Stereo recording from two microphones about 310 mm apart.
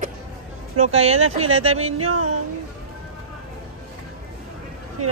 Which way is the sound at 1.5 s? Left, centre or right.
Right.